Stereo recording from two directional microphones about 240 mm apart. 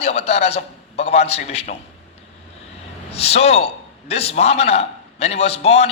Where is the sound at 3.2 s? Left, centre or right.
Left.